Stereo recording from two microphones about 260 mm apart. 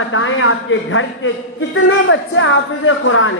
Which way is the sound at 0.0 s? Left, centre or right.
Left.